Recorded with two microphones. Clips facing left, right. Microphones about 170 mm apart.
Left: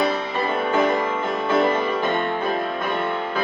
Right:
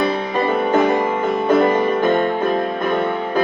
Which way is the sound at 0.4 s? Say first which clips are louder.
Right 5 dB; 45° right (ahead or behind).